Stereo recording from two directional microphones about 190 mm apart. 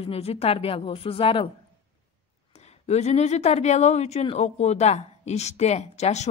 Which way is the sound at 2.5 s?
35° left (ahead or behind).